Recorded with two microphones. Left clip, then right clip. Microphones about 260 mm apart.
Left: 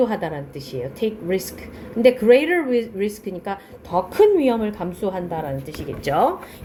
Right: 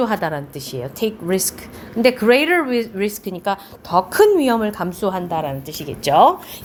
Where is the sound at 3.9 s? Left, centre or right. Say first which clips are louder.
Right 2 dB; right.